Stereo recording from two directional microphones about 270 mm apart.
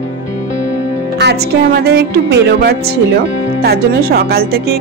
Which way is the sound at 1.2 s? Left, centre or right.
Right.